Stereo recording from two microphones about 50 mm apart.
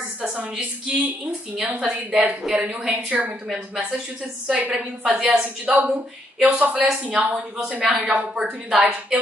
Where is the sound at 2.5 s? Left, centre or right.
Right.